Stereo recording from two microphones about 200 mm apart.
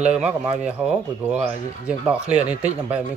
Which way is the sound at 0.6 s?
5° right (ahead or behind).